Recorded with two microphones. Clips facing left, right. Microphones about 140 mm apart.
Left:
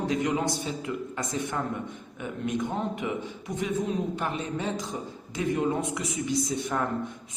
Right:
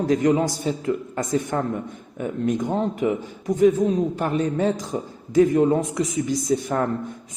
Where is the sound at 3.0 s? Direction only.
40° right (ahead or behind).